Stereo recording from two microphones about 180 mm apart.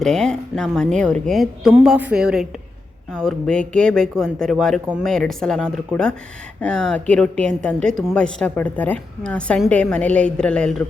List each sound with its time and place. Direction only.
0.0 s a woman's voice: 5° left (ahead or behind)